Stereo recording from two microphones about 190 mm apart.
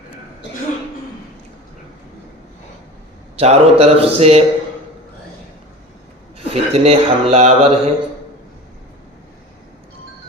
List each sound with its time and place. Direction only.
3.3 s a man's voice: 35° right (ahead or behind)
6.5 s a man's voice: 35° right (ahead or behind)